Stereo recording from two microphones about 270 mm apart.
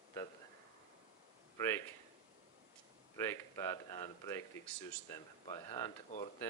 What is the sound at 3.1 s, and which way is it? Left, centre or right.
Speech, centre.